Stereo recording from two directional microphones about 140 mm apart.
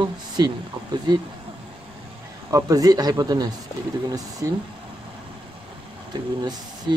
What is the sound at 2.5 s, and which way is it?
Speech, 25° right (ahead or behind).